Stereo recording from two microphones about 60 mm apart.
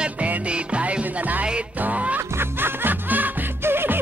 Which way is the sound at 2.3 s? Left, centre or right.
Right.